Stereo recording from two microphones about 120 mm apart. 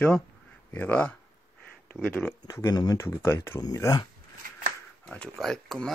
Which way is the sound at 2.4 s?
30° left (ahead or behind).